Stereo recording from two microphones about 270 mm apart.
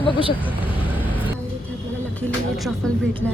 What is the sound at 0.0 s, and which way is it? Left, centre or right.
Speech, centre.